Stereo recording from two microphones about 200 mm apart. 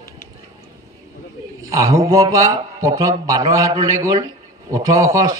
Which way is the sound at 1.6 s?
15° right (ahead or behind).